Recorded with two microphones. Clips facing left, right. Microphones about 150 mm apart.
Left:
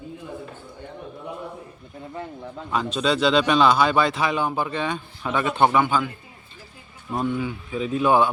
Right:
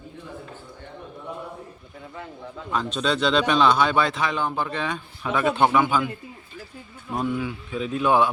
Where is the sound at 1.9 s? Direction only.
35° left (ahead or behind).